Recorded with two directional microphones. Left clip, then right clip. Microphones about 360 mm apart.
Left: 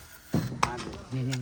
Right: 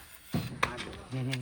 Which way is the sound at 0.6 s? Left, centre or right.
Left.